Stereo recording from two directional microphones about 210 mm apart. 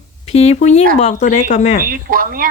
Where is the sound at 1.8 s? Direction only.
40° right (ahead or behind).